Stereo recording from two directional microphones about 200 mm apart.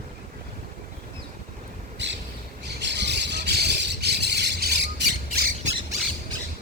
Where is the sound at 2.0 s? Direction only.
60° right (ahead or behind).